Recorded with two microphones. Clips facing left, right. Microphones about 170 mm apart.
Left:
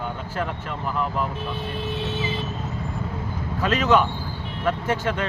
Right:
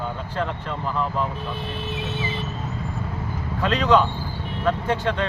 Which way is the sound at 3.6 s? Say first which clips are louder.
Right 1 dB; 5° left (ahead or behind).